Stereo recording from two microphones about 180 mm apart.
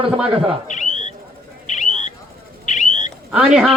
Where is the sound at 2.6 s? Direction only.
40° left (ahead or behind).